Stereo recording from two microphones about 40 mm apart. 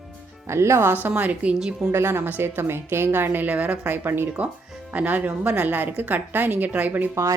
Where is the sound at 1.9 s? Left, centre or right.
Right.